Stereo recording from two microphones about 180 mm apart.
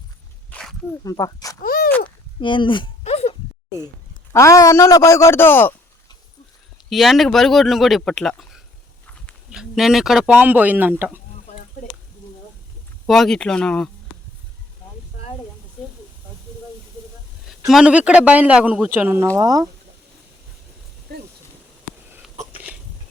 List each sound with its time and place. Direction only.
0.5 s dog: centre (ahead or behind)
1.0 s speech: 20° left (ahead or behind)
1.6 s a sound: 55° left (ahead or behind)
2.4 s a sound: 25° left (ahead or behind)
4.3 s a man's voice: 15° left (ahead or behind)
6.9 s speech: centre (ahead or behind)
13.1 s speech: centre (ahead or behind)
17.7 s speech: 5° right (ahead or behind)
19.4 s speech: 20° right (ahead or behind)